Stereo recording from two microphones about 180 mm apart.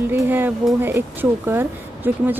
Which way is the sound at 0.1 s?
10° right (ahead or behind).